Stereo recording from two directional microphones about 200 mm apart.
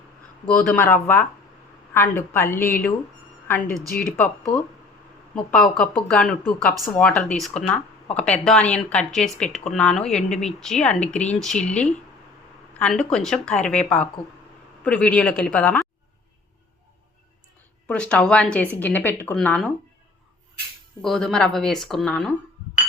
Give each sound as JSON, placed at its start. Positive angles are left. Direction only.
{"t": 0.4, "sound": "speech", "side_deg": 5}
{"t": 3.9, "sound": "speech", "side_deg": 45}
{"t": 5.3, "sound": "speech", "side_deg": 5}
{"t": 17.8, "sound": "speech", "side_deg": 5}
{"t": 21.0, "sound": "speech", "side_deg": 0}